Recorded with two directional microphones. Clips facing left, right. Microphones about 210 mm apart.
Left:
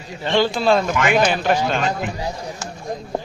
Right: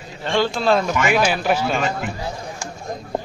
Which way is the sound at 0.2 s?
5° left (ahead or behind).